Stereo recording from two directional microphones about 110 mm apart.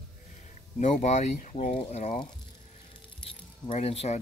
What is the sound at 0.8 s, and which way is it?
Speech, 90° left.